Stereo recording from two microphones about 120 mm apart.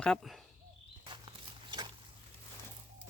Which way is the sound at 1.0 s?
45° right (ahead or behind).